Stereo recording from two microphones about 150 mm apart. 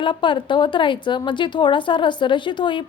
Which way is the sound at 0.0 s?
35° left (ahead or behind).